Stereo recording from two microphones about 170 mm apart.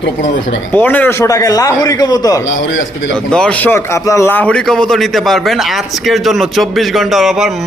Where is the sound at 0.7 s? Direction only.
10° left (ahead or behind).